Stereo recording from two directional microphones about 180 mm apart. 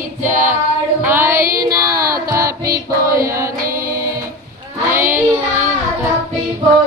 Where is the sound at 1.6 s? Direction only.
20° right (ahead or behind).